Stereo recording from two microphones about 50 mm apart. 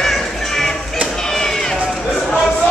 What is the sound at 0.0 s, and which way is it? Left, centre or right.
Music, centre.